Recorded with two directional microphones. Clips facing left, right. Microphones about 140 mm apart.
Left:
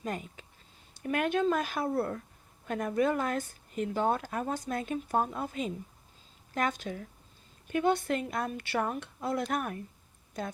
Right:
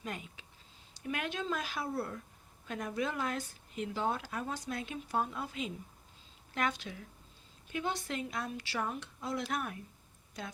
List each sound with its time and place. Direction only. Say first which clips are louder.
0.0 s speech: left 6 dB; 45° left (ahead or behind)